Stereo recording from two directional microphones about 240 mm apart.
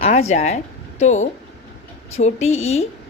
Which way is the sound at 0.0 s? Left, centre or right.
Left.